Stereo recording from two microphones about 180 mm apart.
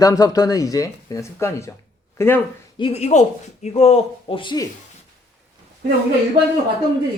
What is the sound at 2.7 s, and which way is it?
Speech, 30° left (ahead or behind).